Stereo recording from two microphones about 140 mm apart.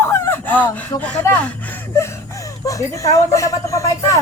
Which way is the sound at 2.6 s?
20° left (ahead or behind).